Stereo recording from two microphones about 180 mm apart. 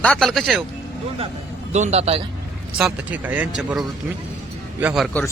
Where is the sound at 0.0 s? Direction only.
5° left (ahead or behind).